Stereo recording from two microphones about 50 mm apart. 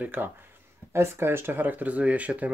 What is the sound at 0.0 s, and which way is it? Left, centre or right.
Speech, right.